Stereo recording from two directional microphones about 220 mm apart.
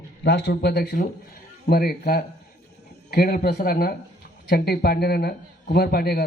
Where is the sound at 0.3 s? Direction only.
50° left (ahead or behind).